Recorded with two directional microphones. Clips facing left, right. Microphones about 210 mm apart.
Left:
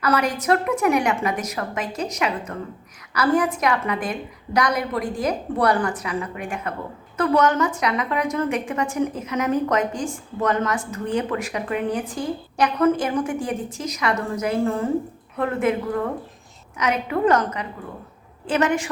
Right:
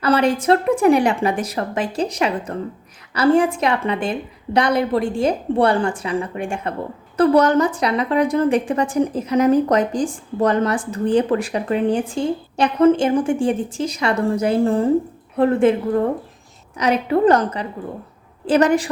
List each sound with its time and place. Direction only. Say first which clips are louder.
0.0 s a woman's voice: right 5 dB; 30° right (ahead or behind)